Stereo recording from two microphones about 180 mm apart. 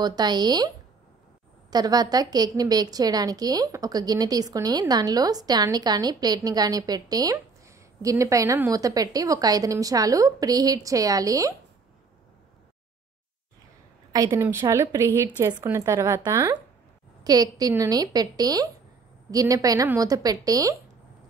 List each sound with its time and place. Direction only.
0.0 s a woman's voice: 25° right (ahead or behind)
14.1 s a woman's voice: 20° right (ahead or behind)